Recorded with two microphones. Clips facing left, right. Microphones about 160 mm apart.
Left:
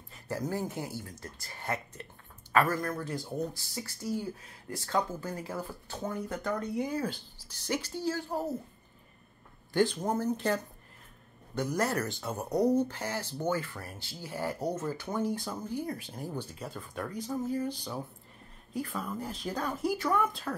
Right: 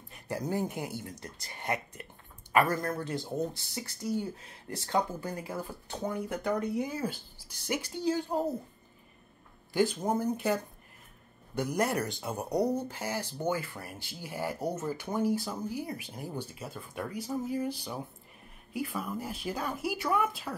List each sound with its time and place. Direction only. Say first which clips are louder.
0.1 s speech: right 1 dB; 15° right (ahead or behind)
2.8 s speech: right 1 dB; 25° right (ahead or behind)
9.7 s speech: even; 10° right (ahead or behind)